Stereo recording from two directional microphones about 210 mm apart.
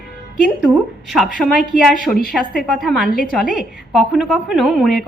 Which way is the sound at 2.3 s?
Centre (ahead or behind).